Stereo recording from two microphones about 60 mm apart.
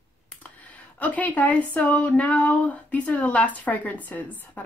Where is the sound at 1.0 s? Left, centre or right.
Left.